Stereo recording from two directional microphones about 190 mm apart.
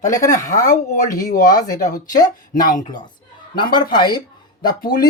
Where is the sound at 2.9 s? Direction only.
20° left (ahead or behind).